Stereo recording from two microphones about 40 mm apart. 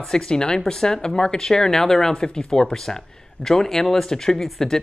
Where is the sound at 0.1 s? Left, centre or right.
Centre.